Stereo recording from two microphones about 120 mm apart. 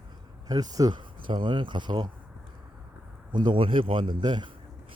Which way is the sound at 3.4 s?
45° right (ahead or behind).